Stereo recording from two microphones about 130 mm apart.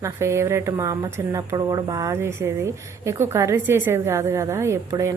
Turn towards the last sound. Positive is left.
turn(degrees=-25)  # may be behind; listen again after turning